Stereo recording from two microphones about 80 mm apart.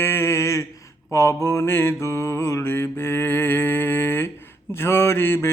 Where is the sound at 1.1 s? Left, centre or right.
Left.